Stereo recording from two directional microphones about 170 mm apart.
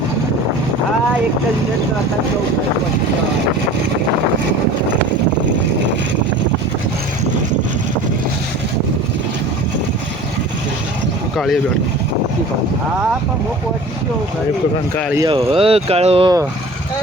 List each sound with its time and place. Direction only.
15.3 s speech: 35° right (ahead or behind)